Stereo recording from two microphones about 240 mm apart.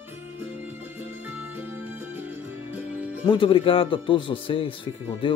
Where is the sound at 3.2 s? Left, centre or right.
Left.